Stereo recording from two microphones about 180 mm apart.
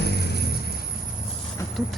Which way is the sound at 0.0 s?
65° left (ahead or behind).